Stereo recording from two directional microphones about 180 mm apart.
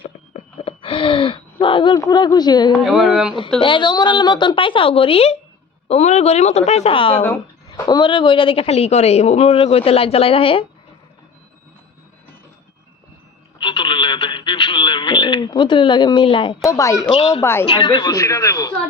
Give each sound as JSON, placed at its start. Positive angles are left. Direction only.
{"t": 0.0, "sound": "a sound", "side_deg": 30}
{"t": 2.9, "sound": "speech", "side_deg": -5}
{"t": 3.6, "sound": "speech", "side_deg": 25}
{"t": 13.6, "sound": "speech", "side_deg": 25}
{"t": 16.6, "sound": "speech", "side_deg": 15}
{"t": 17.2, "sound": "speech", "side_deg": 30}
{"t": 17.4, "sound": "speech", "side_deg": 15}
{"t": 17.7, "sound": "speech", "side_deg": 25}